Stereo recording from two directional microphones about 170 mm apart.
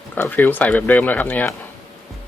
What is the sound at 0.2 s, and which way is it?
Speech, 10° left (ahead or behind).